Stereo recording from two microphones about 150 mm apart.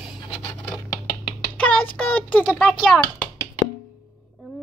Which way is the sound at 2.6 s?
Centre (ahead or behind).